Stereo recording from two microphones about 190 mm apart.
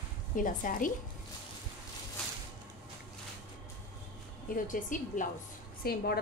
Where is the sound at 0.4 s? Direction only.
45° left (ahead or behind).